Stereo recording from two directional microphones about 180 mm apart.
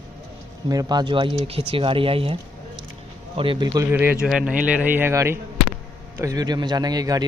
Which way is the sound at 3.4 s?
25° right (ahead or behind).